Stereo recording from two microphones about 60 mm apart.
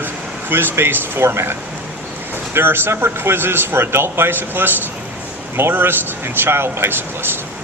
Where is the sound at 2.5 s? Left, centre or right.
Right.